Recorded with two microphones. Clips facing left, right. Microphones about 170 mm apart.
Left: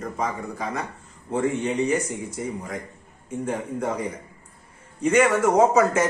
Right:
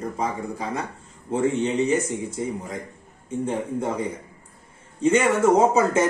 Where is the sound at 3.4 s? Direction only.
25° right (ahead or behind).